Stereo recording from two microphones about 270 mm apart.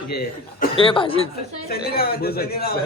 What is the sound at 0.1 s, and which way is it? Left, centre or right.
Speech, left.